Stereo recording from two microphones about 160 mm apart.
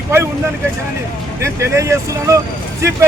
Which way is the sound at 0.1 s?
15° right (ahead or behind).